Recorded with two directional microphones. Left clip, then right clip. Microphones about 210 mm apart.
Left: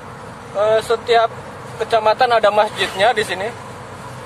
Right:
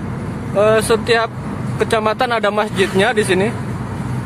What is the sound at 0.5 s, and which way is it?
Speech, 15° right (ahead or behind).